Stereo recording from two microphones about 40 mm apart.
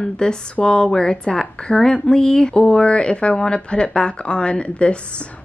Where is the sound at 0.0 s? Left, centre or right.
Left.